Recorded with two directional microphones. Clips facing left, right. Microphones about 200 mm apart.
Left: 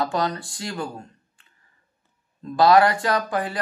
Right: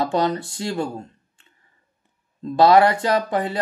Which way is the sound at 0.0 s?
25° right (ahead or behind).